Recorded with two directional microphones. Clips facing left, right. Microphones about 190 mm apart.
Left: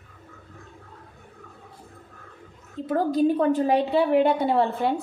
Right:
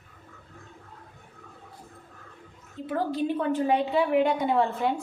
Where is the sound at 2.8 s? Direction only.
40° left (ahead or behind).